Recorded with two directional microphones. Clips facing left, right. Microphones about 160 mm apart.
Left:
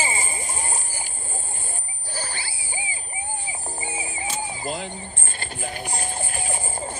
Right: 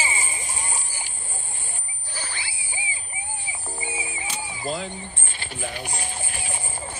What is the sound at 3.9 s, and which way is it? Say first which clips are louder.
Music: left 1 dB; 30° left (ahead or behind).